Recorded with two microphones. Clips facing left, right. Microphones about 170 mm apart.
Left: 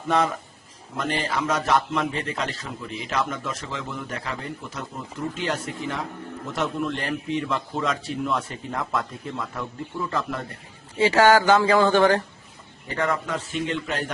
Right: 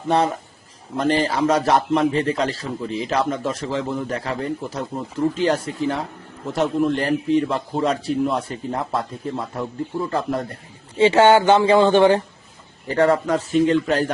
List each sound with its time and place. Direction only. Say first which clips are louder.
0.1 s a man's voice: right 3 dB; 35° right (ahead or behind)
10.9 s speech: right 4 dB; 25° right (ahead or behind)
12.9 s a man's voice: right 8 dB; 35° right (ahead or behind)